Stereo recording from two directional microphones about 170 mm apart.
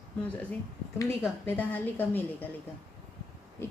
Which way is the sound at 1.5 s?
10° left (ahead or behind).